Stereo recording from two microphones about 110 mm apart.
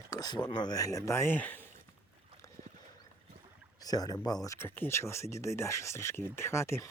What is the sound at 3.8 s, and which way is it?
Speech, 35° left (ahead or behind).